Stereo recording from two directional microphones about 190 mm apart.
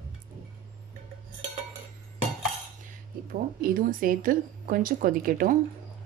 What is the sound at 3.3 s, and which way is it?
Speech, 50° right (ahead or behind).